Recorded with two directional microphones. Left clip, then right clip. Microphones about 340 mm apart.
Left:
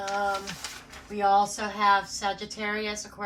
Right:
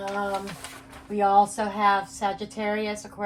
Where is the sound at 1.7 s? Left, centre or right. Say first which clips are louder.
Even; centre.